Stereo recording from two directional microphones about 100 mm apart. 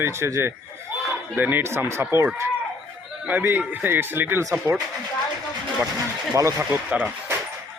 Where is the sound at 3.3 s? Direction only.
20° right (ahead or behind).